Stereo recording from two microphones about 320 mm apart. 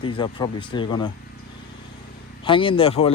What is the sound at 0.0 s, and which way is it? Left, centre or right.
Speech, centre.